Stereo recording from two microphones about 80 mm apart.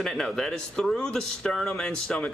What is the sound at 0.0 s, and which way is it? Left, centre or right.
A man's voice, centre.